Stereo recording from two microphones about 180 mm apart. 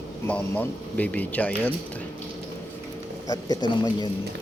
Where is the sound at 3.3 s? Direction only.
25° left (ahead or behind).